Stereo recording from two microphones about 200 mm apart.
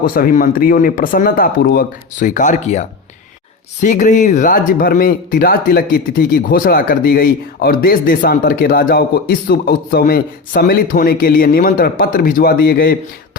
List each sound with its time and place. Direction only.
0.0 s speech: 45° left (ahead or behind)